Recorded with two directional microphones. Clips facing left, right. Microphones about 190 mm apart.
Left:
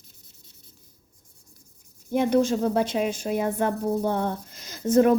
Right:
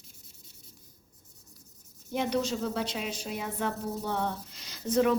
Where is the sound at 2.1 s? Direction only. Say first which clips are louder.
Left 8 dB; 50° left (ahead or behind).